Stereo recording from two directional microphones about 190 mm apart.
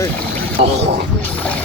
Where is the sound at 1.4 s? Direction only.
5° left (ahead or behind).